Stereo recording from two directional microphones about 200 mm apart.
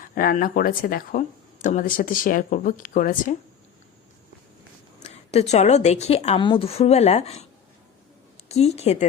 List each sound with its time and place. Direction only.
0.0 s a woman's voice: 45° left (ahead or behind)
5.0 s a woman's voice: 30° left (ahead or behind)
8.4 s a woman's voice: 30° left (ahead or behind)